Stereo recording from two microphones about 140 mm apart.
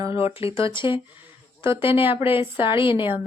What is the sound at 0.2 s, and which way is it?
Speech, 45° left (ahead or behind).